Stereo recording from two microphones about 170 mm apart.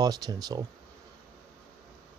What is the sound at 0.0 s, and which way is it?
Speech, 20° right (ahead or behind).